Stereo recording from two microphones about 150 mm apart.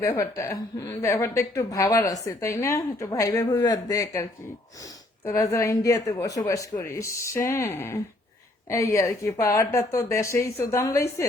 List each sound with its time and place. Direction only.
0.0 s a woman's voice: 20° left (ahead or behind)